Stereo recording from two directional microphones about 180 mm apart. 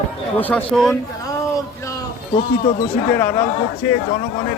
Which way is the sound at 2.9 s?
10° left (ahead or behind).